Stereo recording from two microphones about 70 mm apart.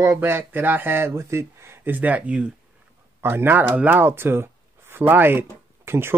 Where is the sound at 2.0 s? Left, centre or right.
Right.